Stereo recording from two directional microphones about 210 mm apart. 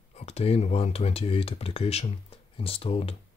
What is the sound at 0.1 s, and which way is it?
Speech, 30° left (ahead or behind).